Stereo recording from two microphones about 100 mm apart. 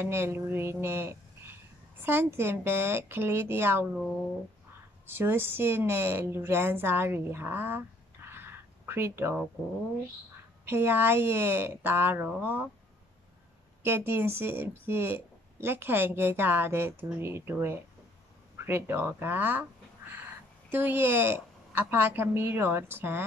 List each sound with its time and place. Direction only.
0.0 s speech: 25° right (ahead or behind)
5.1 s speech: 20° right (ahead or behind)
8.3 s a sound: 25° right (ahead or behind)
10.6 s speech: 20° right (ahead or behind)
13.8 s speech: 20° right (ahead or behind)
20.7 s speech: 20° right (ahead or behind)